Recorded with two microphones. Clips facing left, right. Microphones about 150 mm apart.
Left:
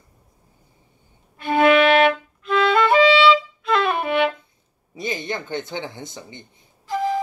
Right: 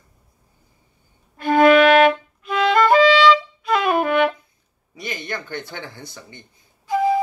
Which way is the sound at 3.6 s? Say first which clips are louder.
Even; 5° right (ahead or behind).